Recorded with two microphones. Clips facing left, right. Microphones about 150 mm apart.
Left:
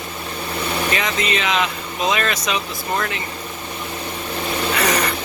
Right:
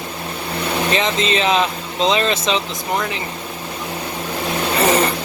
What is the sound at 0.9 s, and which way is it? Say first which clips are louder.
Speech: right 4 dB; 25° right (ahead or behind).